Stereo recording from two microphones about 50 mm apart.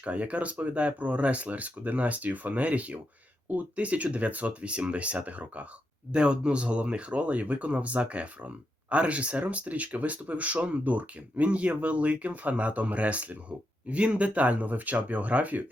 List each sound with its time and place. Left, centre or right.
0.0 s speech: right